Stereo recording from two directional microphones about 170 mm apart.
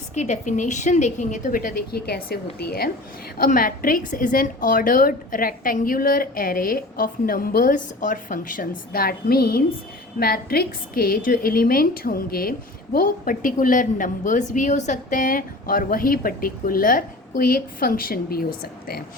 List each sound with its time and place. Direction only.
0.1 s a woman's voice: 45° left (ahead or behind); by 19.0 s 65° left (ahead or behind)